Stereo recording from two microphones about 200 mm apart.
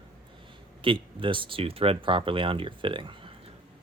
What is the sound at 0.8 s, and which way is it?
Speech, 25° right (ahead or behind).